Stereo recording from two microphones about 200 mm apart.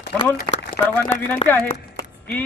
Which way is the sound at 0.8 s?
15° left (ahead or behind).